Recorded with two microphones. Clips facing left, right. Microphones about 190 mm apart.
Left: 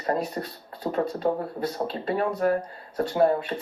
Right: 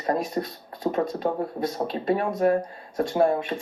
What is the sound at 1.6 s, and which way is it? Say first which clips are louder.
Speech: right 3 dB; 15° right (ahead or behind).